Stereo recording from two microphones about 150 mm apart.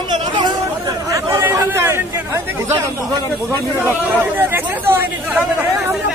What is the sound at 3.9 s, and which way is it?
Speech, 15° right (ahead or behind).